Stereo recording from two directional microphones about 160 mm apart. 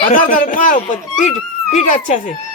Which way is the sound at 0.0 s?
55° left (ahead or behind).